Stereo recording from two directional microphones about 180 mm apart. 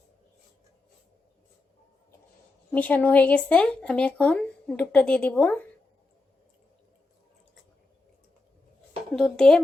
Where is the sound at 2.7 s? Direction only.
10° left (ahead or behind).